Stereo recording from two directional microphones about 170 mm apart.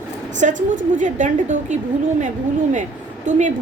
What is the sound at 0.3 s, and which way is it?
A woman's voice, 50° right (ahead or behind).